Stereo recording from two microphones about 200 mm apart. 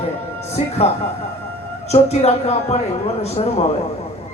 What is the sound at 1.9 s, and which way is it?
Speech, 30° left (ahead or behind).